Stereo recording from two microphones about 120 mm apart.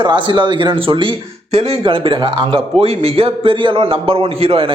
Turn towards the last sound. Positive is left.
turn(degrees=-50)  # may be behind; listen again after turning